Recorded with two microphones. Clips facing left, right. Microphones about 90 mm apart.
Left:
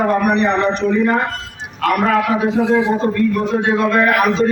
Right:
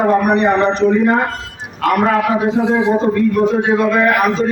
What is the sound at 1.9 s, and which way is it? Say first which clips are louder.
A man's voice: right 1 dB; 30° right (ahead or behind).